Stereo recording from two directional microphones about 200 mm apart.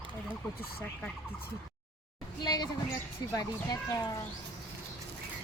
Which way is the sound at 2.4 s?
20° left (ahead or behind).